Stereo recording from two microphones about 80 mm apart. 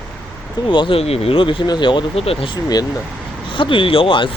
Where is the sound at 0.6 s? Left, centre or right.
Left.